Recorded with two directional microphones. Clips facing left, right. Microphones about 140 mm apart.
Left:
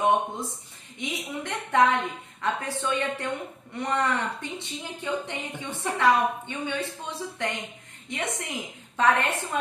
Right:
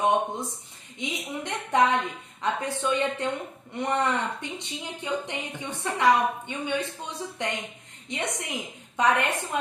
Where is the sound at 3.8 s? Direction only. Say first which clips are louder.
Right 1 dB; 20° right (ahead or behind).